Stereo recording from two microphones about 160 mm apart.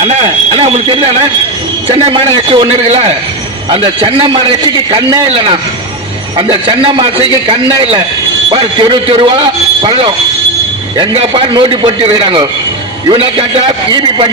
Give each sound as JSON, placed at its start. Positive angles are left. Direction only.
{"t": 0.0, "sound": "a man's voice", "side_deg": -40}